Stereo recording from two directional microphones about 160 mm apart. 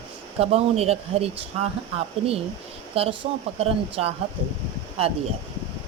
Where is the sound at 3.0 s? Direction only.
35° right (ahead or behind).